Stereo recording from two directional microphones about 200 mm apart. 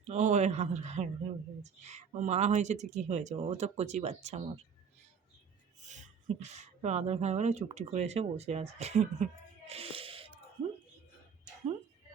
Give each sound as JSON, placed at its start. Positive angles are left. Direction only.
{"t": 0.0, "sound": "speech", "side_deg": -35}
{"t": 5.8, "sound": "speech", "side_deg": -35}